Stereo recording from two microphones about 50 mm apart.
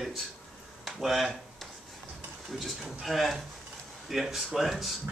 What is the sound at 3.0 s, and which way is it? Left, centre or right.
Speech, centre.